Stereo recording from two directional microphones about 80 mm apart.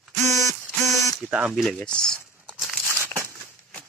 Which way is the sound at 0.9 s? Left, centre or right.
Centre.